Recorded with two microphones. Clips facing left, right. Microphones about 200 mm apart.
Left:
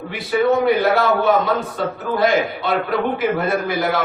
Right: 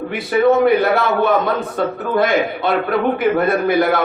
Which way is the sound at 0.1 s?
55° right (ahead or behind).